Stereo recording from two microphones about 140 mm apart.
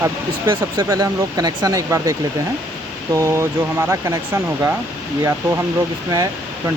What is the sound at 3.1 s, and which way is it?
Speech, 20° right (ahead or behind).